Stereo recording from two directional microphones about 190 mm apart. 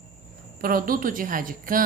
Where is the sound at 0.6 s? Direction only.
50° right (ahead or behind).